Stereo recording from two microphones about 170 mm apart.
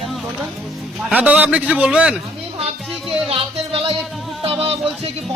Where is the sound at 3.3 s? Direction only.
35° right (ahead or behind).